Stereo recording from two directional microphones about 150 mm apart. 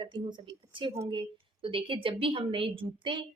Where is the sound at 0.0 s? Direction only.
30° right (ahead or behind).